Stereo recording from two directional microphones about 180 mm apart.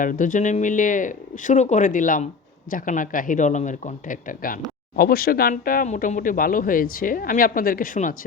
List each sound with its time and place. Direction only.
0.0 s speech: 50° left (ahead or behind)